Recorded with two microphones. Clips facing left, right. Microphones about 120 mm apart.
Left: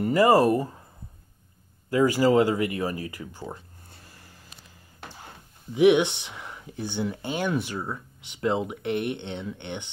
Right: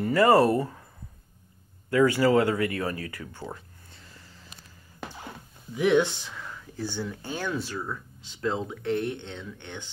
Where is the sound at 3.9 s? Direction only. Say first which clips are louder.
Even; 45° left (ahead or behind).